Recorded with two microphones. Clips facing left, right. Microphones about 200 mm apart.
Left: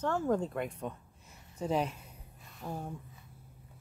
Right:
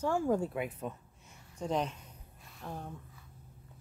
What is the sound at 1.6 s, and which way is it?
Speech, 5° left (ahead or behind).